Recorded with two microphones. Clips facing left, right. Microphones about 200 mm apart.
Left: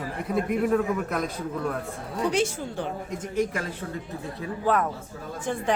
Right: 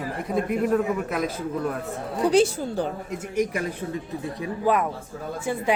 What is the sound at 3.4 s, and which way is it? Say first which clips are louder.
A woman's voice: right 2 dB; 15° right (ahead or behind).